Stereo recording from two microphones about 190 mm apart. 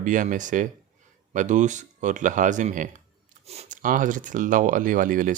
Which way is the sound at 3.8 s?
45° right (ahead or behind).